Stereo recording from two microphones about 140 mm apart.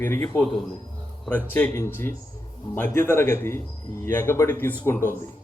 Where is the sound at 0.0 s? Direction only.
15° left (ahead or behind).